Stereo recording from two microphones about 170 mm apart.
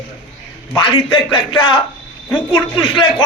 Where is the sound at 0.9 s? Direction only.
30° left (ahead or behind).